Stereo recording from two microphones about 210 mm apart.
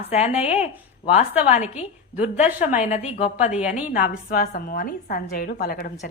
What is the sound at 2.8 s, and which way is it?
Speech, 30° left (ahead or behind).